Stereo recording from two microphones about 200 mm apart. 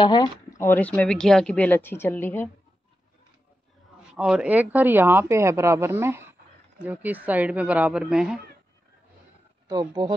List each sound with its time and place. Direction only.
0.0 s speech: 20° left (ahead or behind)
4.1 s speech: 5° right (ahead or behind)
9.7 s speech: 20° right (ahead or behind)